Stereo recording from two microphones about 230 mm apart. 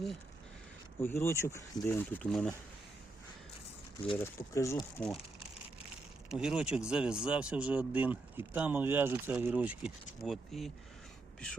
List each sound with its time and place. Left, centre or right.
1.0 s speech: centre
4.2 s speech: centre